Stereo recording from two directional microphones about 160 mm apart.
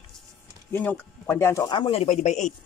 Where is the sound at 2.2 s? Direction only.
50° left (ahead or behind).